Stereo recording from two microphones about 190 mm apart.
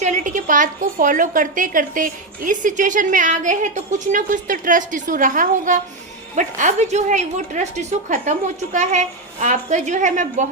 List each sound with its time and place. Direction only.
0.0 s a woman's voice: 40° right (ahead or behind)